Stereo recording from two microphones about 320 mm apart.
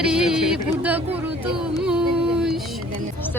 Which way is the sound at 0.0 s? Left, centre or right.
Centre.